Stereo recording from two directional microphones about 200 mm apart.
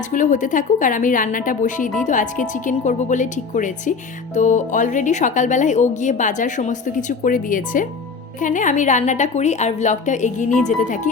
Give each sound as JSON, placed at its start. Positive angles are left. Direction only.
{"t": 0.1, "sound": "a woman's voice", "side_deg": 40}